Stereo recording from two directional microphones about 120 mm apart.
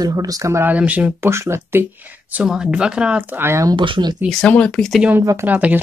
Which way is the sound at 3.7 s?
45° right (ahead or behind).